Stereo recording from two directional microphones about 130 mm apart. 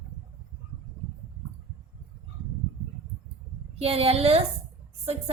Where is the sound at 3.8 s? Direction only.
50° right (ahead or behind).